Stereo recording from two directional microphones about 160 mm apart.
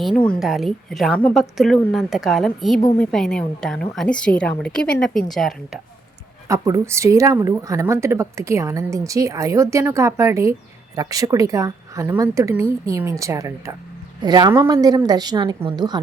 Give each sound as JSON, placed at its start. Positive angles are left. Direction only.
{"t": 0.3, "sound": "a woman's voice", "side_deg": 0}
{"t": 6.5, "sound": "speech", "side_deg": -20}